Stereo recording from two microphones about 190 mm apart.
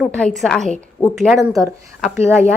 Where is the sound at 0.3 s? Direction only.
Centre (ahead or behind).